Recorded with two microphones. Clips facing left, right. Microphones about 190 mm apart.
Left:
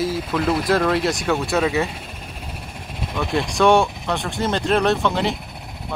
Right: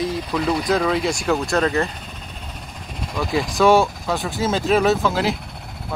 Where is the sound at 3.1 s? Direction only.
Centre (ahead or behind).